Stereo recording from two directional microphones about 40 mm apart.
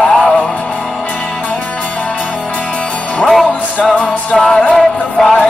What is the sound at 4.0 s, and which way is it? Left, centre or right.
Music, left.